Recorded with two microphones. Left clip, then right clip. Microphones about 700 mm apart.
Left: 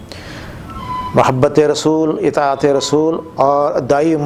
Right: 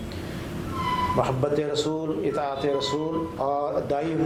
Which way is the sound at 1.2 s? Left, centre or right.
Left.